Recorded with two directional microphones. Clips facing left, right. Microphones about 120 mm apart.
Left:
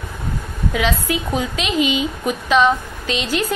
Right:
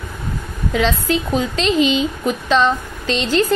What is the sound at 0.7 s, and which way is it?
A woman's voice, 10° left (ahead or behind).